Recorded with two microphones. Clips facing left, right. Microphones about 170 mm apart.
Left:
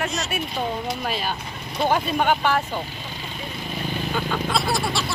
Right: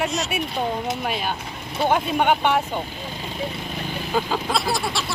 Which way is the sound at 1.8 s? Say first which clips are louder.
Right 1 dB; 5° right (ahead or behind).